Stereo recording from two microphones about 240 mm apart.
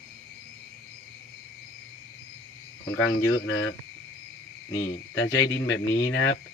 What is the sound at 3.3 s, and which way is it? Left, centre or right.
Speech, left.